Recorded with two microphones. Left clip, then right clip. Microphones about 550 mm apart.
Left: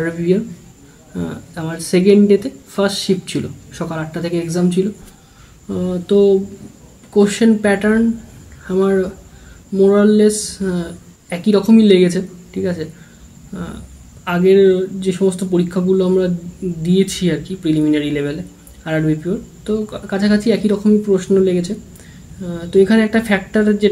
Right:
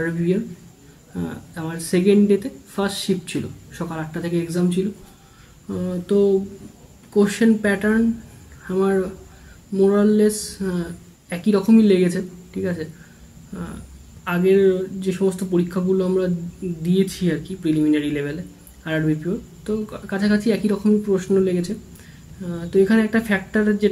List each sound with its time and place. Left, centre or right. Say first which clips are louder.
1.1 s speech: left 5 dB; right
13.5 s a sound: left 5 dB; right
14.2 s speech: left 5 dB; right